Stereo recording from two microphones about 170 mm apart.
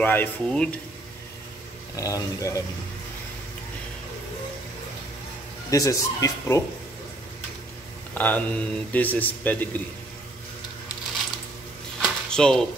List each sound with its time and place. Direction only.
0.0 s a man's voice: 10° left (ahead or behind)
2.0 s speech: 20° left (ahead or behind)
5.7 s speech: 20° left (ahead or behind)
8.1 s a man's voice: 10° left (ahead or behind)
12.0 s a sound: 5° left (ahead or behind)